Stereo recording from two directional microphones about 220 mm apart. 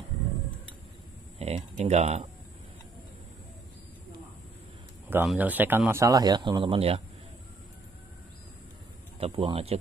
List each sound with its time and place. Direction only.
1.4 s speech: 25° right (ahead or behind)
5.1 s speech: 5° right (ahead or behind); by 7.0 s 25° right (ahead or behind)
9.2 s speech: 25° right (ahead or behind)